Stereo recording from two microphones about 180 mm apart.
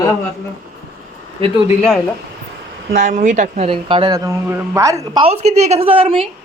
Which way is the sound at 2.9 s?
50° right (ahead or behind).